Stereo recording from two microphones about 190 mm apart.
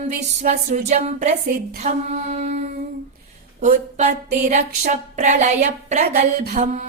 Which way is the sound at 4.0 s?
35° right (ahead or behind).